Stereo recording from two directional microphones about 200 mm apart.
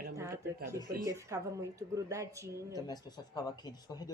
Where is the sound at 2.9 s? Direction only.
20° left (ahead or behind).